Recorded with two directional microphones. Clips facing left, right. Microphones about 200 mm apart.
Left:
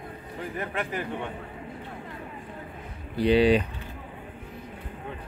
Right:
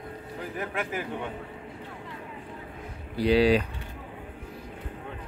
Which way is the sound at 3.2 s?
5° right (ahead or behind).